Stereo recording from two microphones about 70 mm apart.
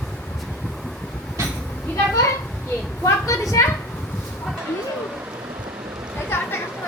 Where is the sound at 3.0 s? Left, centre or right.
Left.